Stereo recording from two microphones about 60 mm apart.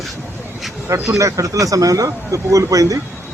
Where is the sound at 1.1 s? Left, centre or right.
Right.